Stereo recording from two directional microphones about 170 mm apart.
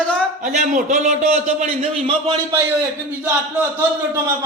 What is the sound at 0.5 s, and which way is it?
A man's voice, 45° right (ahead or behind).